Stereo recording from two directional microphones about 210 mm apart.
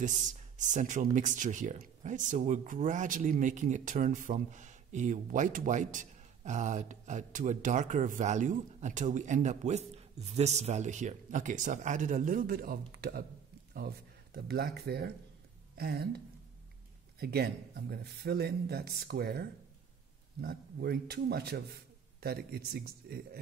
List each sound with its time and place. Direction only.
0.0 s speech: 35° right (ahead or behind)
17.2 s speech: 50° right (ahead or behind)